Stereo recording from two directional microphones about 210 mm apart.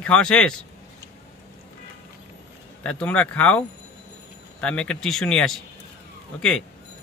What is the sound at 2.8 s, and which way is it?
Speech, 5° left (ahead or behind).